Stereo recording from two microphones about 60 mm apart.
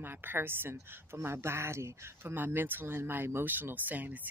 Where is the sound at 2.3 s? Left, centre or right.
Right.